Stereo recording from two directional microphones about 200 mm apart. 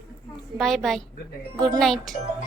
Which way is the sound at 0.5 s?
Centre (ahead or behind).